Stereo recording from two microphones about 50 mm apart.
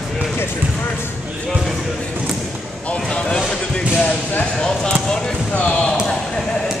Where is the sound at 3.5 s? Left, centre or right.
Left.